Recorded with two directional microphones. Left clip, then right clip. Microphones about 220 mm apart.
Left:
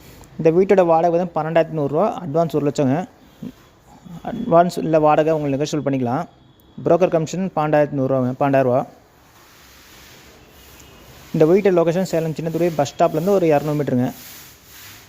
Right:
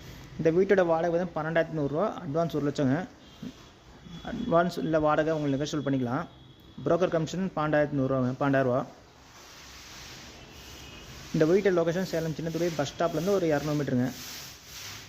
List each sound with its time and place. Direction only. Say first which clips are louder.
0.6 s speech: left 10 dB; 30° left (ahead or behind)
4.3 s a man's voice: left 10 dB; 30° left (ahead or behind)
11.3 s speech: left 9 dB; 30° left (ahead or behind)